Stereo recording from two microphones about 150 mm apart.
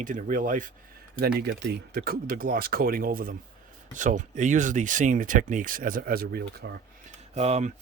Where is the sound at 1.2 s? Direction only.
90° right; by 3.3 s 70° right (ahead or behind).